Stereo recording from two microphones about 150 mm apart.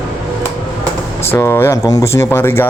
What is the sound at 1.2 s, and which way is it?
Speech, 20° left (ahead or behind).